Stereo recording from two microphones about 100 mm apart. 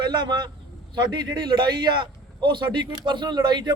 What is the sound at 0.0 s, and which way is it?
A man's voice, 50° right (ahead or behind).